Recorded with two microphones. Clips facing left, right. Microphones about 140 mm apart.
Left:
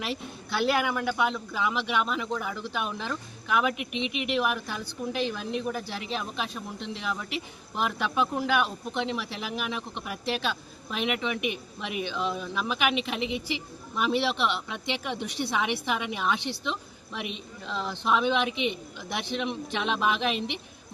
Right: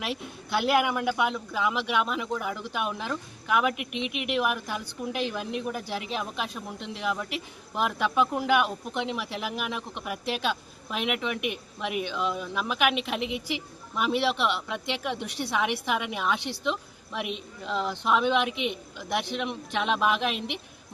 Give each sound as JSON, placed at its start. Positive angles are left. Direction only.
{"t": 0.0, "sound": "a woman's voice", "side_deg": -10}